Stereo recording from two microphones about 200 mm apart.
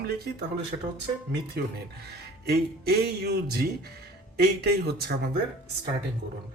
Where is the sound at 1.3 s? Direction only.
55° right (ahead or behind).